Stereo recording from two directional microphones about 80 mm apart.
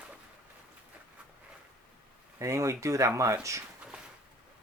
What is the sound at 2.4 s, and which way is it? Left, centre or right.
Speech, right.